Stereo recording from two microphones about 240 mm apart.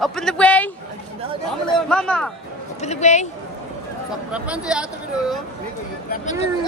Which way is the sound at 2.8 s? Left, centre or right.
Left.